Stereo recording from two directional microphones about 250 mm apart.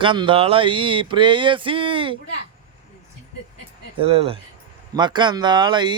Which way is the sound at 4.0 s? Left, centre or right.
Right.